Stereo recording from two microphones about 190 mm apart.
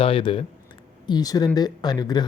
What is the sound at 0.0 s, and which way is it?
Speech, 30° left (ahead or behind).